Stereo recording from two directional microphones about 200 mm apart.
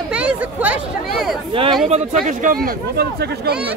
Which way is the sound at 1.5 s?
25° right (ahead or behind).